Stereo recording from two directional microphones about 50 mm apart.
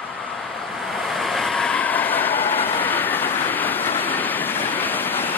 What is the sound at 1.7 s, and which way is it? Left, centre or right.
Train, left.